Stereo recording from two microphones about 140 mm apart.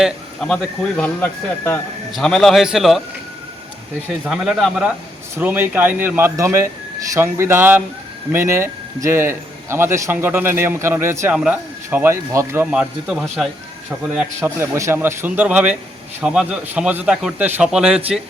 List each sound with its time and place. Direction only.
0.0 s speech: 5° left (ahead or behind)
2.1 s a man's voice: 5° left (ahead or behind)
4.3 s a man's voice: 5° right (ahead or behind); by 12.6 s 20° right (ahead or behind)
12.7 s a man's voice: 5° right (ahead or behind)
14.4 s a man's voice: 20° right (ahead or behind)